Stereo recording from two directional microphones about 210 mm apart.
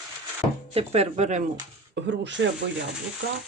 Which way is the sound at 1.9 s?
55° right (ahead or behind).